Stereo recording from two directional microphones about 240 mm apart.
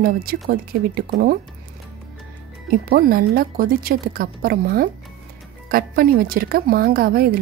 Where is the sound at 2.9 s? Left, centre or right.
Right.